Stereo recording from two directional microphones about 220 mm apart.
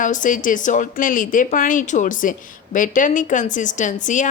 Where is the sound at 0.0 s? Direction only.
35° left (ahead or behind).